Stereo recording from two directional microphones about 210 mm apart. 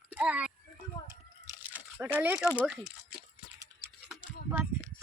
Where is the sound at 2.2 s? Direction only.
5° right (ahead or behind).